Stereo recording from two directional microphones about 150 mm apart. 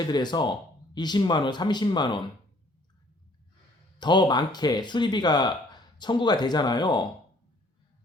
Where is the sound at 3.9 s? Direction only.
30° left (ahead or behind).